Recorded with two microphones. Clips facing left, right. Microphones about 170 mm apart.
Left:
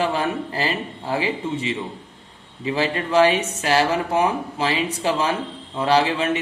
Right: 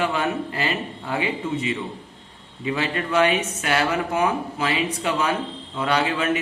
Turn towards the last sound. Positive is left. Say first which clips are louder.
# left 3 dB
turn(degrees=30)  # may be behind; listen again after turning